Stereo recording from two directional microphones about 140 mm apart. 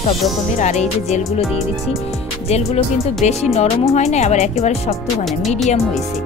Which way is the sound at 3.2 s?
50° left (ahead or behind).